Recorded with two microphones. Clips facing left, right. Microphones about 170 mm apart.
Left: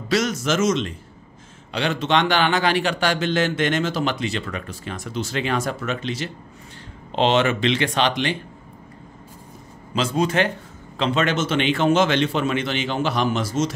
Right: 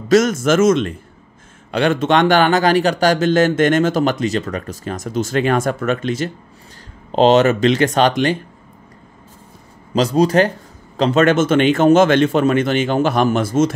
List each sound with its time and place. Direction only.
0.1 s a man's voice: 50° right (ahead or behind)
9.9 s a man's voice: 40° right (ahead or behind); by 13.7 s 55° right (ahead or behind)